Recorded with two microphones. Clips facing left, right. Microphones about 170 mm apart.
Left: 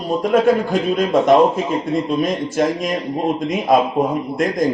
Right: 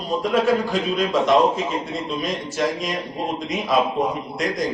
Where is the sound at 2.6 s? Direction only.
50° left (ahead or behind).